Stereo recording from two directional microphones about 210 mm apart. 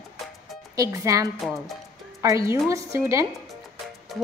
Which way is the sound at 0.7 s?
15° right (ahead or behind).